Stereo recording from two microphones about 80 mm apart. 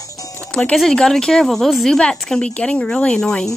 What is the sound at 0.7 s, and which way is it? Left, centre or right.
Speech, centre.